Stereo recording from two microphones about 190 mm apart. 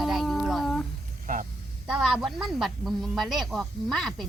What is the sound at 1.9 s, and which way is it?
Speech, 5° right (ahead or behind).